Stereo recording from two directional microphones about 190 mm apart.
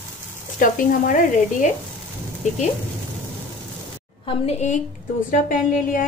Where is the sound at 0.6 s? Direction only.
45° left (ahead or behind).